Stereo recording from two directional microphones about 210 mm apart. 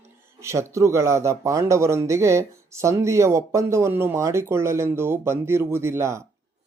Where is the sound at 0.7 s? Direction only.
15° right (ahead or behind).